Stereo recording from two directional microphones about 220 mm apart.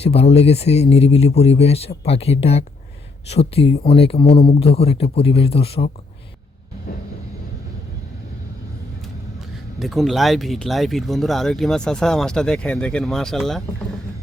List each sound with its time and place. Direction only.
0.0 s speech: 25° left (ahead or behind)
9.4 s speech: centre (ahead or behind)